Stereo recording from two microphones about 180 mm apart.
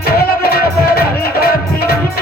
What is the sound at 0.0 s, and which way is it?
Music, 55° left (ahead or behind).